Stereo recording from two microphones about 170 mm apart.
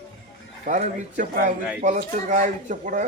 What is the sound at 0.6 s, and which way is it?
Speech, 50° right (ahead or behind).